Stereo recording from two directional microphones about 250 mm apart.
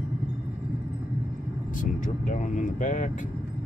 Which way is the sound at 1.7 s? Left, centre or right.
Left.